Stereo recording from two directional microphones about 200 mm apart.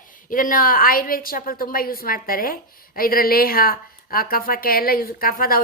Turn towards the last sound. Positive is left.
turn(degrees=45)  # may be behind; listen again after turning